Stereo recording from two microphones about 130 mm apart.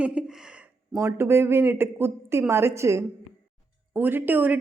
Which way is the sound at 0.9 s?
20° right (ahead or behind).